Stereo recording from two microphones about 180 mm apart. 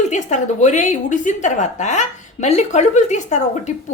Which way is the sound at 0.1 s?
40° left (ahead or behind).